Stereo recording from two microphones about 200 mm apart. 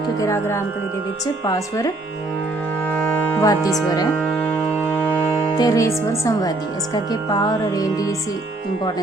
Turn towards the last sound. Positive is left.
turn(degrees=15)  # may be behind; listen again after turning